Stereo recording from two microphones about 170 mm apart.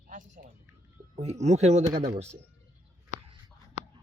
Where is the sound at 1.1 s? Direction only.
40° right (ahead or behind).